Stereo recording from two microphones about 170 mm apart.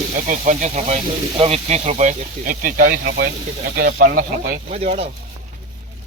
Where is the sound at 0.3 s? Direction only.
45° right (ahead or behind); by 3.2 s 75° right (ahead or behind).